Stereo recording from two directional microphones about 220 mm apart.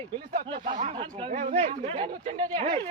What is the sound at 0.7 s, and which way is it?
Speech, 30° right (ahead or behind).